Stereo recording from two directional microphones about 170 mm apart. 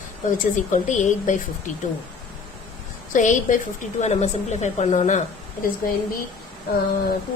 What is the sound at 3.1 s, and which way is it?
A woman's voice, 50° left (ahead or behind).